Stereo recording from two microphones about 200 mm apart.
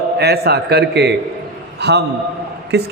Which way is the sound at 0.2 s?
55° right (ahead or behind).